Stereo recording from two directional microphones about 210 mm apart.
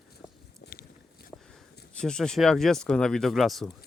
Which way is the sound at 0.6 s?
50° left (ahead or behind).